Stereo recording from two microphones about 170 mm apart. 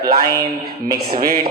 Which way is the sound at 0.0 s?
65° right (ahead or behind).